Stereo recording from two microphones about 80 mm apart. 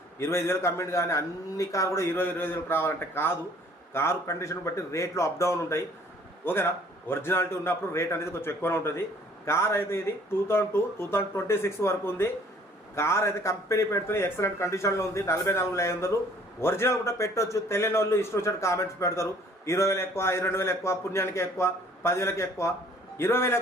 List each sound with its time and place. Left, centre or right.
0.2 s a man's voice: left